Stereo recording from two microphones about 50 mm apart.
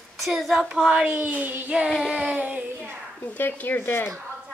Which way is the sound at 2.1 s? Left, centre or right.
Right.